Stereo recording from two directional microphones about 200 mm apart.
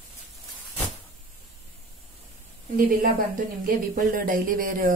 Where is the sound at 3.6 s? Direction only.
45° right (ahead or behind).